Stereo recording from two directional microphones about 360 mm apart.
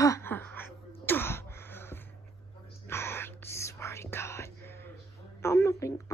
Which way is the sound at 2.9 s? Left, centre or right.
Centre.